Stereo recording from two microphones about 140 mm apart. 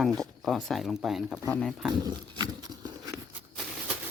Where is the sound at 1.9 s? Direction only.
30° right (ahead or behind).